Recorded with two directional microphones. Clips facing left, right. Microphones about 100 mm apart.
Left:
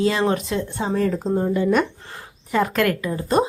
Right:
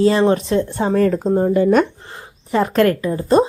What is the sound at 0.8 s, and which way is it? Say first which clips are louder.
Speech: right 4 dB; 60° right (ahead or behind).